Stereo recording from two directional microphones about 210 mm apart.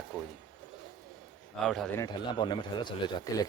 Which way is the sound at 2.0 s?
20° left (ahead or behind).